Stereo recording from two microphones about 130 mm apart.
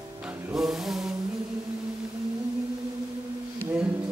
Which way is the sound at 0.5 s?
5° right (ahead or behind).